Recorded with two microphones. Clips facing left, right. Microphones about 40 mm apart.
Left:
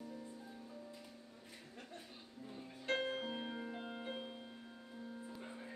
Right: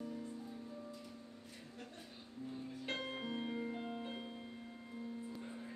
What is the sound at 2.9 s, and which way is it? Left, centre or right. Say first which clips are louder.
Music: left 4 dB; centre.